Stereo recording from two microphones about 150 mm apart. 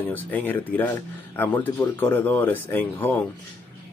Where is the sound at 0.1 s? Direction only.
10° left (ahead or behind).